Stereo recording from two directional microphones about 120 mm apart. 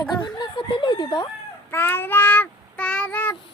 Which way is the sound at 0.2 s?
40° left (ahead or behind).